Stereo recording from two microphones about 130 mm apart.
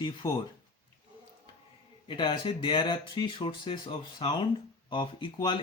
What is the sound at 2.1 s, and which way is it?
Speech, 40° left (ahead or behind).